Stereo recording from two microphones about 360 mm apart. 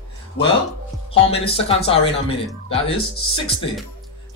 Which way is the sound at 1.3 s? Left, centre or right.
Centre.